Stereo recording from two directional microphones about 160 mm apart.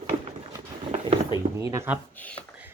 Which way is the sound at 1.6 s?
20° right (ahead or behind).